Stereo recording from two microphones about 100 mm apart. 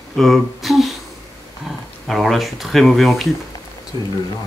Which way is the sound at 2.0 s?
Centre (ahead or behind).